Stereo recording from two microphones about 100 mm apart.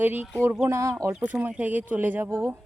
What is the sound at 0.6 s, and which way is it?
Speech, 30° right (ahead or behind).